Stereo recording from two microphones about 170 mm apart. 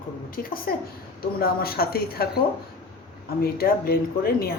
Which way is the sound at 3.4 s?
65° left (ahead or behind).